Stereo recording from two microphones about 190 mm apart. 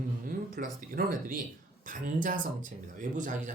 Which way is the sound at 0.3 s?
45° right (ahead or behind).